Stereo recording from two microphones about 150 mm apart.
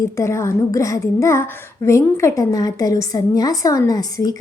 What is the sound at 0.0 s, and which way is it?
Speech, 20° left (ahead or behind).